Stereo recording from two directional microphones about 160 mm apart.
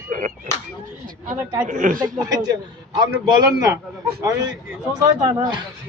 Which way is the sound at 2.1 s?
25° right (ahead or behind).